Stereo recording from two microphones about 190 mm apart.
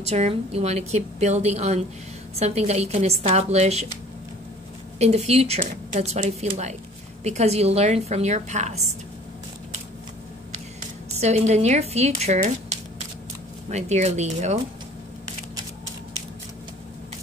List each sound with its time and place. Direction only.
0.0 s a woman's voice: 35° right (ahead or behind)
4.9 s a woman's voice: 35° right (ahead or behind)
11.1 s a woman's voice: 35° right (ahead or behind)